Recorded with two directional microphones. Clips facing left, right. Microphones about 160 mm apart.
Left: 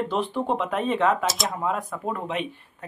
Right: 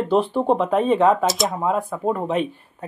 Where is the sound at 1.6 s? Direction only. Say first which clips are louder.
Right 6 dB; 30° right (ahead or behind).